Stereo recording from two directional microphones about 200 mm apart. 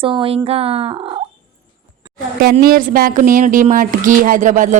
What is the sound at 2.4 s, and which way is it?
A woman's voice, 50° right (ahead or behind).